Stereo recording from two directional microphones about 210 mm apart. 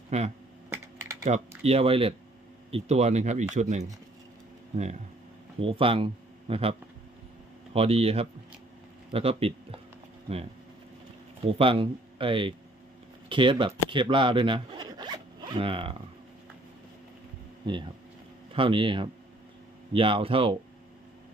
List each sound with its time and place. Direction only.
0.1 s speech: 30° right (ahead or behind)
5.5 s speech: 25° right (ahead or behind)
11.5 s speech: 25° right (ahead or behind)
17.7 s speech: 20° right (ahead or behind)